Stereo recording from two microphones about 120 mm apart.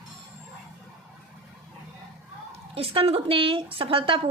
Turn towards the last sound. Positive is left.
turn(degrees=-50)  # may be behind; listen again after turning